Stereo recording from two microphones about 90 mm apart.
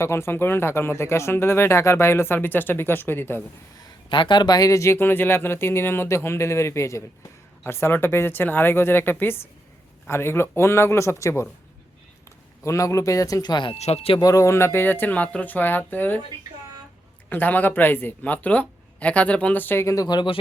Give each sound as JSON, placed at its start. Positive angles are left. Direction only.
{"t": 0.0, "sound": "speech", "side_deg": 30}
{"t": 3.8, "sound": "speech", "side_deg": 60}
{"t": 12.6, "sound": "speech", "side_deg": 35}
{"t": 14.2, "sound": "speech", "side_deg": 40}
{"t": 17.2, "sound": "speech", "side_deg": 20}
{"t": 20.1, "sound": "speech", "side_deg": 55}